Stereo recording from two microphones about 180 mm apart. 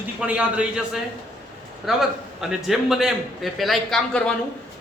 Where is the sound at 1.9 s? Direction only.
Centre (ahead or behind).